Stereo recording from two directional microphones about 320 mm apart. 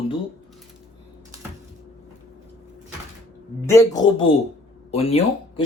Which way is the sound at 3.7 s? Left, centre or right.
Centre.